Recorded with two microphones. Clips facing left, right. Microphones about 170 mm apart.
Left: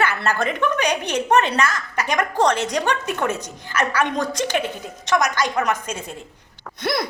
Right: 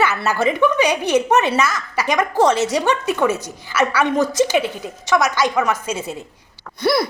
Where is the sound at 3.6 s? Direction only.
10° right (ahead or behind).